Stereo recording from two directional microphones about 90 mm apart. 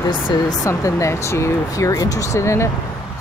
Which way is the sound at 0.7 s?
35° left (ahead or behind).